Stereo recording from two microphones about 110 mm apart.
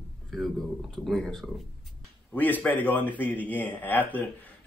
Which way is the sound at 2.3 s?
15° left (ahead or behind).